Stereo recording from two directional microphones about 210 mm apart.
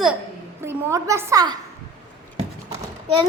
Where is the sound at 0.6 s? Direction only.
10° right (ahead or behind).